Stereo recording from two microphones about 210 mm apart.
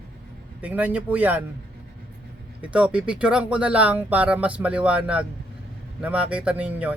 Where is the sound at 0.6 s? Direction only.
5° right (ahead or behind).